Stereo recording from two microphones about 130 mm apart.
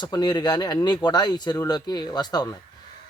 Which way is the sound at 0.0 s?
30° left (ahead or behind).